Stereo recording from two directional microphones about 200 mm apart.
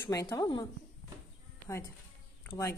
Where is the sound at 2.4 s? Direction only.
15° left (ahead or behind).